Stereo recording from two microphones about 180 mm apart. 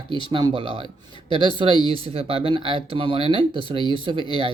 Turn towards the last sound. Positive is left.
turn(degrees=-25)  # may be behind; listen again after turning